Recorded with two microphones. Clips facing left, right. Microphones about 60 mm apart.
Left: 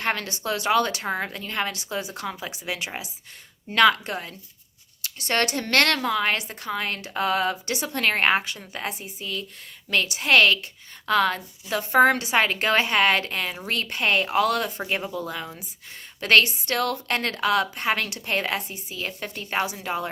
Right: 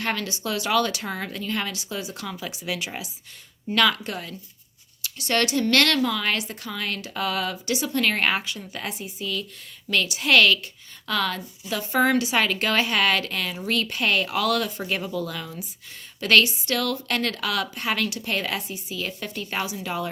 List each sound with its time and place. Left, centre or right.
0.0 s a woman's voice: left
16.2 s a woman's voice: left